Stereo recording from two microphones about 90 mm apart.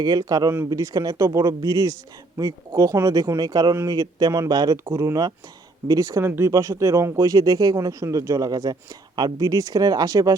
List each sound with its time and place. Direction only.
0.0 s speech: 45° right (ahead or behind)